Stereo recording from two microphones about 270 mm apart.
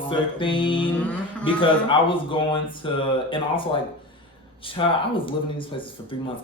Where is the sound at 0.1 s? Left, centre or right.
Centre.